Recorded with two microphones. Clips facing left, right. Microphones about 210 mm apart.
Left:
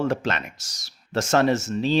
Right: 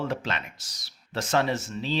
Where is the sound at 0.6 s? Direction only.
80° left.